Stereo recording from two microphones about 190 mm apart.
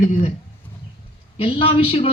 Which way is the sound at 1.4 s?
30° left (ahead or behind).